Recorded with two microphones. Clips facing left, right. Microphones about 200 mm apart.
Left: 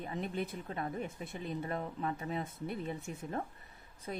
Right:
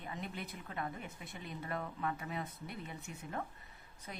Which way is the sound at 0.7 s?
30° left (ahead or behind).